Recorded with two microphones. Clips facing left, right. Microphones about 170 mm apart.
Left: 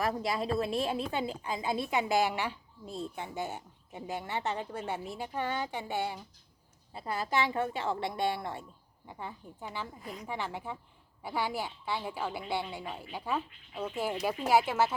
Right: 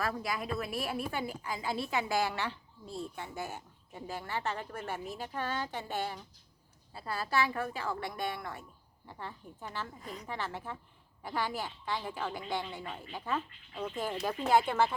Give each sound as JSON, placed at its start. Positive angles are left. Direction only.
{"t": 0.0, "sound": "a woman's voice", "side_deg": 25}
{"t": 9.0, "sound": "a woman's voice", "side_deg": 15}
{"t": 10.2, "sound": "a woman's voice", "side_deg": 15}